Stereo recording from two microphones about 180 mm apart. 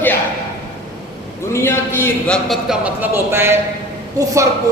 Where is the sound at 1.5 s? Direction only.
15° left (ahead or behind).